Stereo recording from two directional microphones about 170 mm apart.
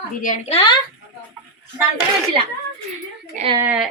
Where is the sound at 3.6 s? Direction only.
5° right (ahead or behind).